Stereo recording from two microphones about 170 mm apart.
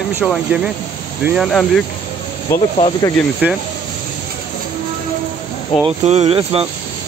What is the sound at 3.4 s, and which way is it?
Speech, 10° right (ahead or behind).